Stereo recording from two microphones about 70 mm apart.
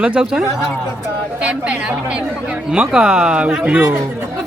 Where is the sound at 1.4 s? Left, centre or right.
Centre.